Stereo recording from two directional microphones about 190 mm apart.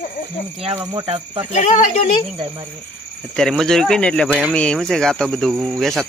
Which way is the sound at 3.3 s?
Centre (ahead or behind).